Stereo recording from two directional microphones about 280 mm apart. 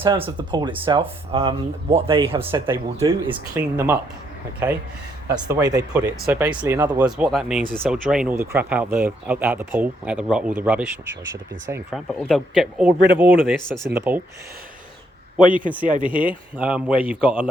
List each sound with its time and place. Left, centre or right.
0.0 s speech: centre
15.4 s a man's voice: centre
16.6 s speech: centre